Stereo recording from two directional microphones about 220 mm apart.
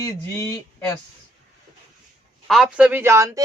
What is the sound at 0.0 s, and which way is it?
Speech, 15° left (ahead or behind).